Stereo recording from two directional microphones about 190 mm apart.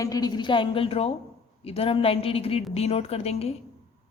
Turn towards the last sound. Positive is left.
turn(degrees=30)  # may be behind; listen again after turning